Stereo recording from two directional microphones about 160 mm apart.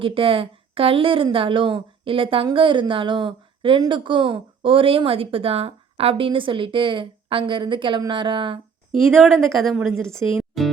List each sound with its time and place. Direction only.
0.0 s a woman's voice: 35° right (ahead or behind)
9.3 s a woman's voice: centre (ahead or behind)
10.5 s music: centre (ahead or behind)